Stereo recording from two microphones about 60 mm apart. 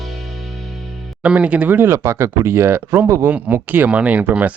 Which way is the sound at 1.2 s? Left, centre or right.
Right.